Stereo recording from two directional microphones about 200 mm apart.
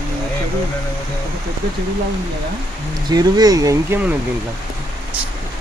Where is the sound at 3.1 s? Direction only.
20° right (ahead or behind).